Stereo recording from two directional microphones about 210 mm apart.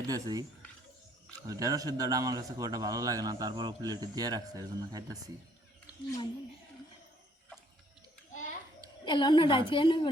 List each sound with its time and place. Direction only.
0.1 s a man's voice: 20° right (ahead or behind)
1.5 s a man's voice: 15° right (ahead or behind)
8.3 s children playing: 35° left (ahead or behind)
9.0 s a woman's voice: 20° left (ahead or behind)